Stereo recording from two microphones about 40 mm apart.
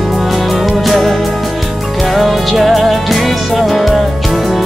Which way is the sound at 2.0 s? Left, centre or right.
Centre.